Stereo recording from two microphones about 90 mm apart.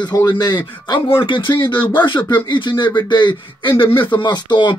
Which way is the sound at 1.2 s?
65° left (ahead or behind).